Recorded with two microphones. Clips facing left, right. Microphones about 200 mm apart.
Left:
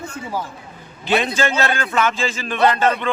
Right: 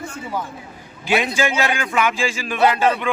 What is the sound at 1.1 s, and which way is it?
A man's voice, 10° right (ahead or behind).